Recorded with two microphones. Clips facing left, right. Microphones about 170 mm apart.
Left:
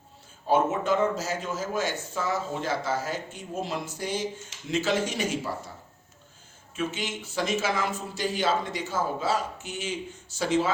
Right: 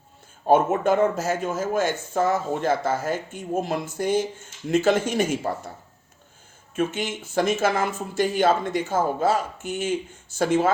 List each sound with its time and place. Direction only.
0.4 s speech: 55° right (ahead or behind)
6.7 s speech: 50° right (ahead or behind)